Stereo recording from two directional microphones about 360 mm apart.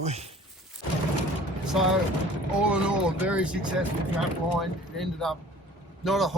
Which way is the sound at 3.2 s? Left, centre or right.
Centre.